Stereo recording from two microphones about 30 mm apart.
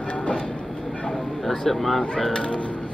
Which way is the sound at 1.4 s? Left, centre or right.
Centre.